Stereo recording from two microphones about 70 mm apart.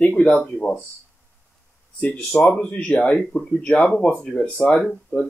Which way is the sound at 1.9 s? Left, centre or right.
Left.